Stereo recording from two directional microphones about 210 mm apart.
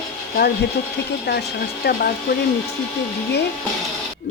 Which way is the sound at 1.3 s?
55° left (ahead or behind).